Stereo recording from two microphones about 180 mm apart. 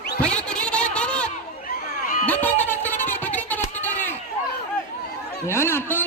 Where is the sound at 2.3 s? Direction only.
10° left (ahead or behind).